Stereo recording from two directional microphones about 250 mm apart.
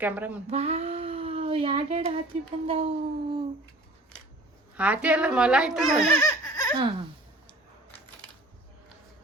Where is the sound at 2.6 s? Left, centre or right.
Right.